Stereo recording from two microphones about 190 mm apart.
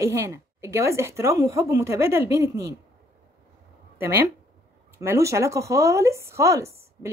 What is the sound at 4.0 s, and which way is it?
Speech, 10° right (ahead or behind).